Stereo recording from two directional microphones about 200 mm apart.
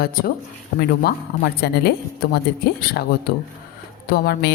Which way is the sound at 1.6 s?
55° left (ahead or behind).